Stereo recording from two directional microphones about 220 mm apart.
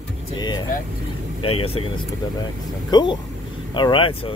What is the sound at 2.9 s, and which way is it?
Speech, 20° left (ahead or behind).